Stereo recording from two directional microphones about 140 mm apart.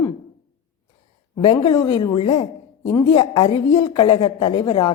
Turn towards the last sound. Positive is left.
turn(degrees=40)  # may be behind; listen again after turning